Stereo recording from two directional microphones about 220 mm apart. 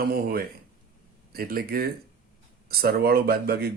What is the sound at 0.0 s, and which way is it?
A man's voice, 45° right (ahead or behind).